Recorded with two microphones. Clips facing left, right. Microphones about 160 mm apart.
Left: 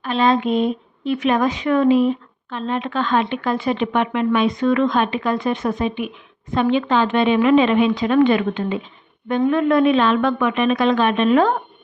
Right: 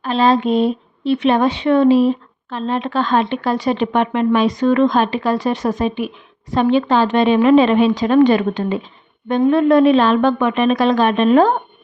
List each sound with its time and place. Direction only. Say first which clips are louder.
0.0 s speech: right 3 dB; 35° right (ahead or behind)